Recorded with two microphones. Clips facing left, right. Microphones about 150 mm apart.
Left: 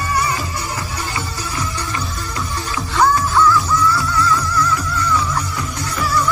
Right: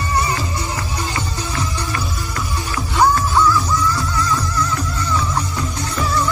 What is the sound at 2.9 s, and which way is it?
Music, 20° right (ahead or behind).